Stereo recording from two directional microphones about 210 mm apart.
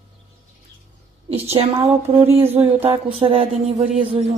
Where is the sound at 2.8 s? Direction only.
25° right (ahead or behind).